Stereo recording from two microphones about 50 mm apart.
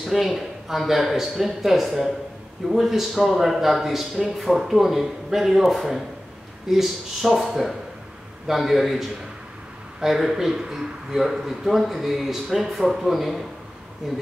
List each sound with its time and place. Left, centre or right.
0.0 s a man's voice: centre